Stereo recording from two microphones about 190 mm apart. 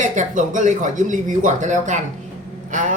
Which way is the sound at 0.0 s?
40° right (ahead or behind).